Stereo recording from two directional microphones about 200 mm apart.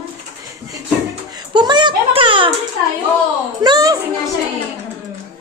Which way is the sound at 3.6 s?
20° right (ahead or behind).